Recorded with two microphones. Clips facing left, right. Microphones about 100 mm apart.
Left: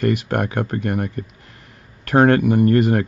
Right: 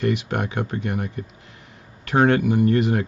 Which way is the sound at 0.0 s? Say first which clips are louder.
Left 3 dB; 50° left (ahead or behind).